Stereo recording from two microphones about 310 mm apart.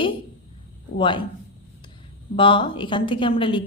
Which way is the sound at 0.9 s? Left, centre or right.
Centre.